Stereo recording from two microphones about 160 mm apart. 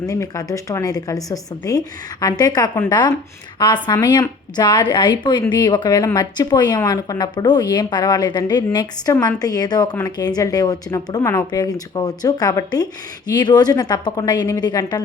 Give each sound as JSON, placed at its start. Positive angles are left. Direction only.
{"t": 0.1, "sound": "speech", "side_deg": 20}